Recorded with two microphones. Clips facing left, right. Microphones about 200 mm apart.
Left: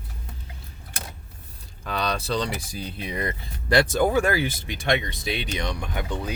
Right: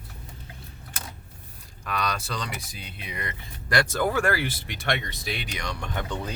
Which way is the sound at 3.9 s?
15° left (ahead or behind).